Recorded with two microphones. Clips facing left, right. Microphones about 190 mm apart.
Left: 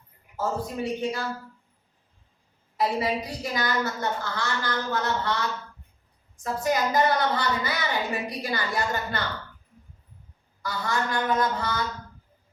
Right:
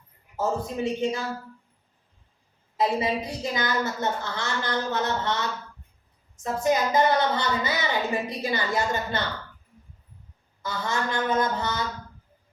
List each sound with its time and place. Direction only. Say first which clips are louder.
0.3 s a woman's voice: right 2 dB; 20° right (ahead or behind)
2.7 s a woman's voice: right 1 dB; 20° right (ahead or behind)
6.4 s a woman's voice: right 2 dB; 20° right (ahead or behind)
10.6 s a woman's voice: even; 20° right (ahead or behind)